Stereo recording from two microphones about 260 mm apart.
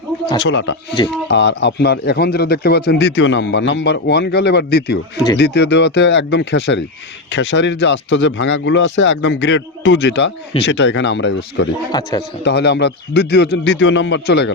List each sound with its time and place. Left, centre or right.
0.3 s a man's voice: left
11.9 s speech: centre
12.5 s a man's voice: left